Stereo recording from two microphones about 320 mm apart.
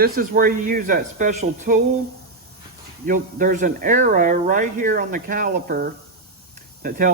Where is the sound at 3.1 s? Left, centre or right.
Right.